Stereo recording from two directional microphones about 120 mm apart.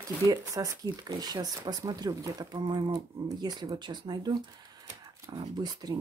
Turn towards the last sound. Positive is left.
turn(degrees=-35)  # may be behind; listen again after turning